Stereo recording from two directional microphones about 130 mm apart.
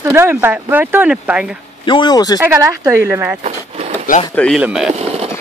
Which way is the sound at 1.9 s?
35° left (ahead or behind).